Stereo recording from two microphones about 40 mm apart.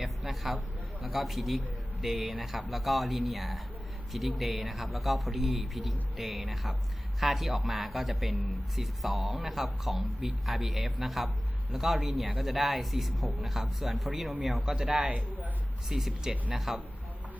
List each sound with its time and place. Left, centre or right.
0.0 s a sound: centre
1.0 s a man's voice: centre
15.0 s a man's voice: right
15.9 s speech: centre